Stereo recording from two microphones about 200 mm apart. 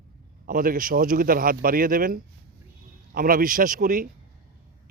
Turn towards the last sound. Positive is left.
turn(degrees=-45)  # may be behind; listen again after turning